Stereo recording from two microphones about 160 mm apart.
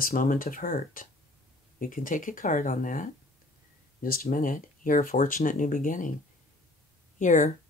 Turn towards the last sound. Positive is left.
turn(degrees=50)  # may be behind; listen again after turning